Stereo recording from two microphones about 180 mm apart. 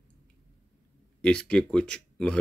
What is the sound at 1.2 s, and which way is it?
Speech, 5° left (ahead or behind).